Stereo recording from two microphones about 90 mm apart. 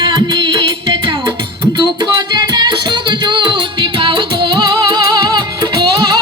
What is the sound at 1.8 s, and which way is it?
Music, 60° right (ahead or behind).